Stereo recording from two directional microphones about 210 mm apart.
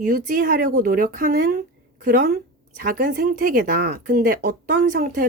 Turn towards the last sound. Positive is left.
turn(degrees=-40)  # may be behind; listen again after turning